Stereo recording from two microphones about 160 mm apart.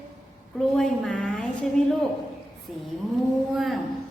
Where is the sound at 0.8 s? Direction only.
5° left (ahead or behind).